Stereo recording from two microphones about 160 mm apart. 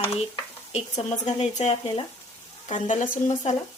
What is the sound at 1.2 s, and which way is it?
Speech, 45° left (ahead or behind).